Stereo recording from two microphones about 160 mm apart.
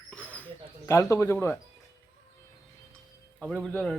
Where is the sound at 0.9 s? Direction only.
20° left (ahead or behind).